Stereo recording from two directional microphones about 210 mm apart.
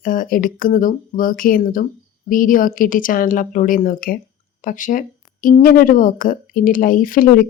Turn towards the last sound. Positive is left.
turn(degrees=40)  # may be behind; listen again after turning